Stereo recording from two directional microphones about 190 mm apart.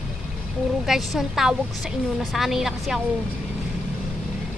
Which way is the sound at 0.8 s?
Centre (ahead or behind).